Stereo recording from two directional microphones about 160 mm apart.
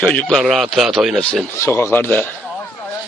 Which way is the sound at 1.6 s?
15° left (ahead or behind).